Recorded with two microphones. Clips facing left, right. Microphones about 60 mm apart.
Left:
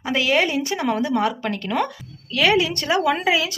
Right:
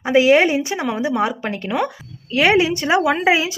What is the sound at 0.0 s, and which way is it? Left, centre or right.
Speech, right.